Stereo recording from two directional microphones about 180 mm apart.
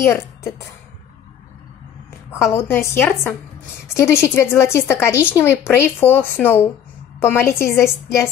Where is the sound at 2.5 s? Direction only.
15° left (ahead or behind).